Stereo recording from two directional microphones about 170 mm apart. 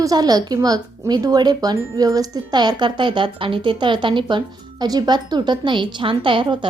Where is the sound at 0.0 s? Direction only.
20° right (ahead or behind).